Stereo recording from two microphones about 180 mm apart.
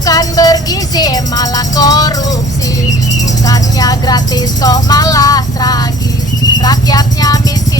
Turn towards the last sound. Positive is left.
turn(degrees=20)  # may be behind; listen again after turning